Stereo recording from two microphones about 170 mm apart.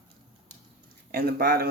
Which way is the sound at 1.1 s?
65° right (ahead or behind).